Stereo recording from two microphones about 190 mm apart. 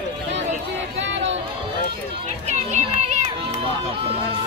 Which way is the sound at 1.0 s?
70° right (ahead or behind).